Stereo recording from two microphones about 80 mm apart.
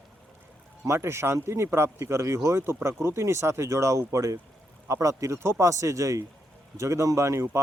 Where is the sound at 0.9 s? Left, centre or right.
Right.